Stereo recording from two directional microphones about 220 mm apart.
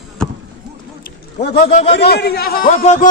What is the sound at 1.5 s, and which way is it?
Speech, 30° left (ahead or behind).